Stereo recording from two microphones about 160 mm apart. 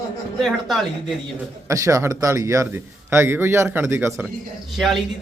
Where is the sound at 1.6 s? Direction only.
20° right (ahead or behind).